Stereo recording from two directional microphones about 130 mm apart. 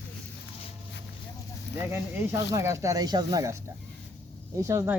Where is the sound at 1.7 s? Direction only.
20° right (ahead or behind).